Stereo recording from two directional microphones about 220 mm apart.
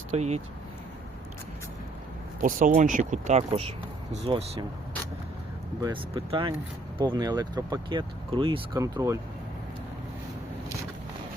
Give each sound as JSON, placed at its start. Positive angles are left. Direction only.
{"t": 0.1, "sound": "speech", "side_deg": -30}
{"t": 2.4, "sound": "speech", "side_deg": -35}
{"t": 5.8, "sound": "speech", "side_deg": -20}